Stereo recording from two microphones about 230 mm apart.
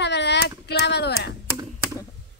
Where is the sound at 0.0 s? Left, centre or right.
Left.